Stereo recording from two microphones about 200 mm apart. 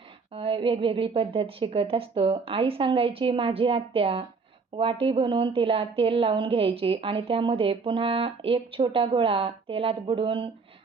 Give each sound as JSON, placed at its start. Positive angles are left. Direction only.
{"t": 0.3, "sound": "a woman's voice", "side_deg": -25}